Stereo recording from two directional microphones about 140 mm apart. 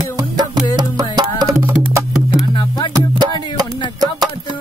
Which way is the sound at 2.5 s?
35° left (ahead or behind).